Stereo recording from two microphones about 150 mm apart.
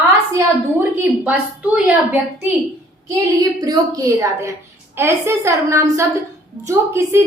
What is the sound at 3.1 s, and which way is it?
A woman's voice, 25° right (ahead or behind).